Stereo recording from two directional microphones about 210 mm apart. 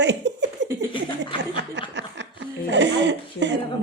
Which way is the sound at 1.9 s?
55° right (ahead or behind).